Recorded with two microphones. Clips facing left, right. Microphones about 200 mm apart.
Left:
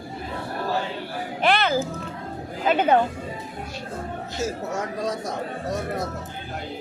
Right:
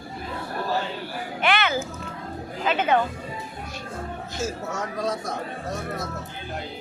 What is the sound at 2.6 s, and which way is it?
Speech, 35° left (ahead or behind).